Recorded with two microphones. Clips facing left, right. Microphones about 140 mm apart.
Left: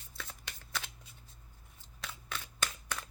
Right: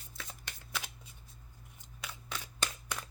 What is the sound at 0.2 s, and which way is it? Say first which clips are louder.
Shuffling cards: left 1 dB; 10° right (ahead or behind).